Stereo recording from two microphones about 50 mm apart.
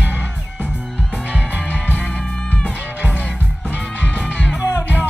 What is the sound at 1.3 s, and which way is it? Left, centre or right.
Music, right.